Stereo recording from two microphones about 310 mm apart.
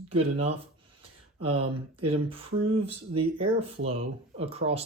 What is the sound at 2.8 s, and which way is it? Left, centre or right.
Speech, centre.